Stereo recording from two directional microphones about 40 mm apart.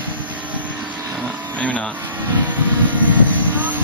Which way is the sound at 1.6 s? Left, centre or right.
Left.